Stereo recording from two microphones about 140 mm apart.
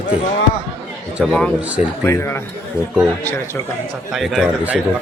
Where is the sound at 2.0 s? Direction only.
20° left (ahead or behind).